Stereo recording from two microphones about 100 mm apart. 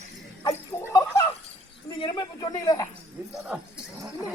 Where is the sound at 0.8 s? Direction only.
30° left (ahead or behind).